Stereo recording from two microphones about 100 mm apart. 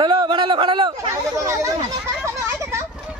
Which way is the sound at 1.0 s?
30° right (ahead or behind).